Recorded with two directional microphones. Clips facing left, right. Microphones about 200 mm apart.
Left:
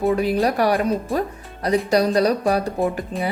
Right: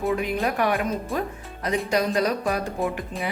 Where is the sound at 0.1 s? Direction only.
35° left (ahead or behind).